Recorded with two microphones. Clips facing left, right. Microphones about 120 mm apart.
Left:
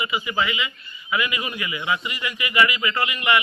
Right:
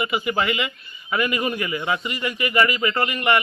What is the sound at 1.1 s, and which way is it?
Speech, 45° right (ahead or behind).